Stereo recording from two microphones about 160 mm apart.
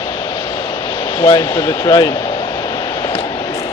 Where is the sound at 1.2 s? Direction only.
20° left (ahead or behind).